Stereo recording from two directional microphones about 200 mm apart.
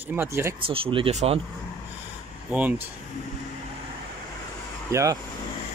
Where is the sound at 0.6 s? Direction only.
25° right (ahead or behind).